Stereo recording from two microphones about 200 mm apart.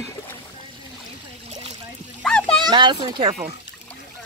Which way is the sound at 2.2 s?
5° left (ahead or behind).